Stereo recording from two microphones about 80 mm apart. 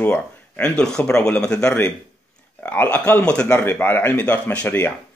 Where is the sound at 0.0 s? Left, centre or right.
Centre.